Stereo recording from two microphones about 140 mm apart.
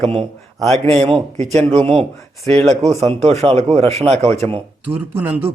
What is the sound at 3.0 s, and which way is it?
Speech, 50° right (ahead or behind).